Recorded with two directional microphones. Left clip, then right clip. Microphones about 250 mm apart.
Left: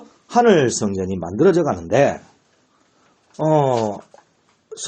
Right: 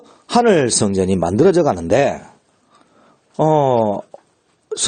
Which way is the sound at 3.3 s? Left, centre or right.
Right.